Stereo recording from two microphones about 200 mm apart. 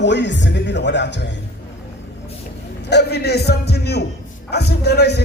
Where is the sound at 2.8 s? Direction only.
55° left (ahead or behind).